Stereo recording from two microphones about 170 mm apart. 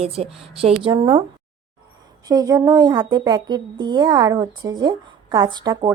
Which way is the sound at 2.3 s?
20° right (ahead or behind).